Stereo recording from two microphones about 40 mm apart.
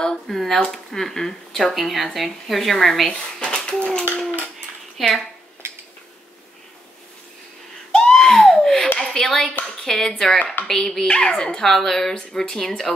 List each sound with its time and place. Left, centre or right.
0.0 s a woman's voice: centre
3.1 s speech: left
5.0 s a woman's voice: centre
7.9 s baby cry: centre
8.5 s a sound: centre
9.0 s speech: centre
11.1 s speech: left